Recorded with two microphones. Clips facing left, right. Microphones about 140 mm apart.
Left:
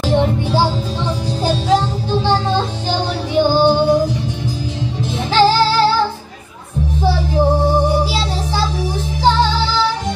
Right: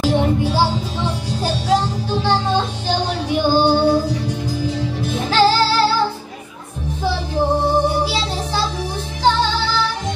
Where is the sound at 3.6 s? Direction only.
15° left (ahead or behind).